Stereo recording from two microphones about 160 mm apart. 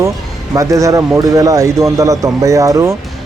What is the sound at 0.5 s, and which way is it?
Speech, 20° right (ahead or behind).